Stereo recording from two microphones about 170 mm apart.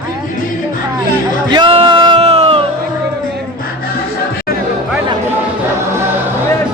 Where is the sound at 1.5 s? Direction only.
30° right (ahead or behind).